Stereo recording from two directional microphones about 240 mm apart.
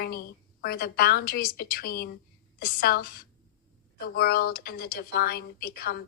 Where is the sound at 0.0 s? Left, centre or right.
Left.